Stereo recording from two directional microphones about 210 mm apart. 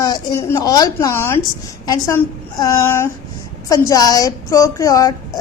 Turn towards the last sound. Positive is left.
turn(degrees=15)  # may be behind; listen again after turning